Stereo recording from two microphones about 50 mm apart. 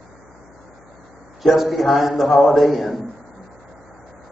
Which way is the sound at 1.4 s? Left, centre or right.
Centre.